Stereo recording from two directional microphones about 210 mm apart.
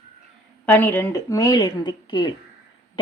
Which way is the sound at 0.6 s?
10° left (ahead or behind).